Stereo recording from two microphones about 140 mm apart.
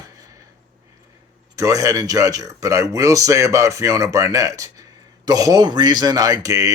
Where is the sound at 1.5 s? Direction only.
20° right (ahead or behind).